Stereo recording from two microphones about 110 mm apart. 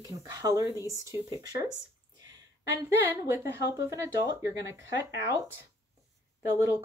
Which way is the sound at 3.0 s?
25° right (ahead or behind).